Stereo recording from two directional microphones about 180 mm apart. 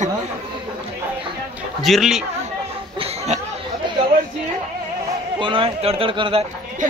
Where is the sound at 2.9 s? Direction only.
35° right (ahead or behind).